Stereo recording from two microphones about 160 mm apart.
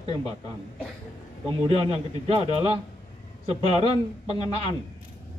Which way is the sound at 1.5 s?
35° right (ahead or behind).